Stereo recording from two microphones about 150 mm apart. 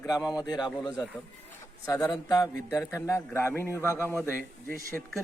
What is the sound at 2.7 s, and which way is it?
Speech, 15° left (ahead or behind).